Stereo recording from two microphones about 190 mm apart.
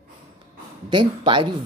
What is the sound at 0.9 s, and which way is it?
Speech, 25° right (ahead or behind).